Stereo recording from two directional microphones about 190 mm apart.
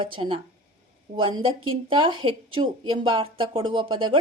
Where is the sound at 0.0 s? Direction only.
25° right (ahead or behind).